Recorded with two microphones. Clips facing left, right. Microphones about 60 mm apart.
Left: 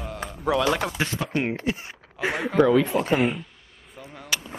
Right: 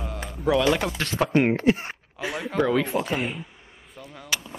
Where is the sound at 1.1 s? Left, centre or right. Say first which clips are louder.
Right 6 dB; right.